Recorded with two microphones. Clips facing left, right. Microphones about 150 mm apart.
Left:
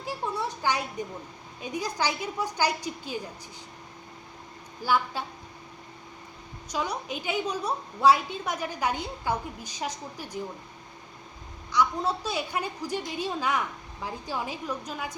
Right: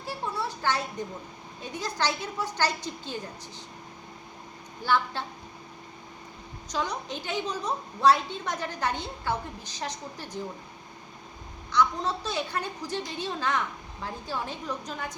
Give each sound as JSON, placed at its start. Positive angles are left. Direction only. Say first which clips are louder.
{"t": 0.0, "sound": "a sound", "louder": "left 1 dB", "side_deg": 15}
{"t": 1.6, "sound": "a woman's voice", "louder": "left 1 dB", "side_deg": 10}
{"t": 4.8, "sound": "a woman's voice", "louder": "even", "side_deg": 10}
{"t": 6.7, "sound": "a woman's voice", "louder": "even", "side_deg": 10}
{"t": 11.7, "sound": "a woman's voice", "louder": "even", "side_deg": 10}